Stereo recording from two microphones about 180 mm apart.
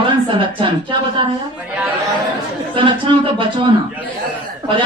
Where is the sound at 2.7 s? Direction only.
30° right (ahead or behind).